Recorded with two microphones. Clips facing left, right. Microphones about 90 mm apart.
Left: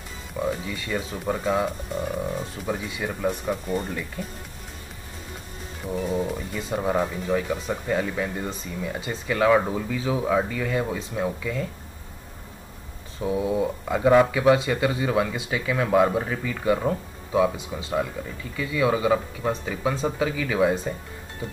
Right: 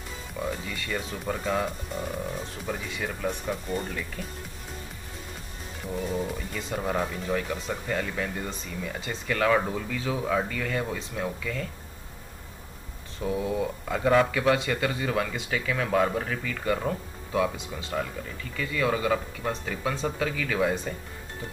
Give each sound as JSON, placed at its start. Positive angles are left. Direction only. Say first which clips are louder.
{"t": 0.4, "sound": "speech", "louder": "left 5 dB", "side_deg": 10}
{"t": 5.9, "sound": "wild animals", "louder": "left 4 dB", "side_deg": 5}
{"t": 6.3, "sound": "speech", "louder": "left 4 dB", "side_deg": 10}
{"t": 13.2, "sound": "speech", "louder": "left 4 dB", "side_deg": 10}